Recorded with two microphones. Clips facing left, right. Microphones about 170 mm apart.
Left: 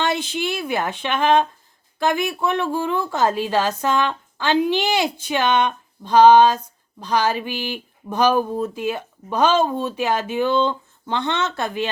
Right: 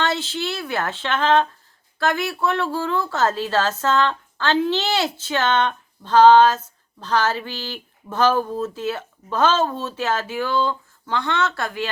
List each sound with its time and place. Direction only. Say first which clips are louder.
0.0 s a woman's voice: left 1 dB; 15° left (ahead or behind)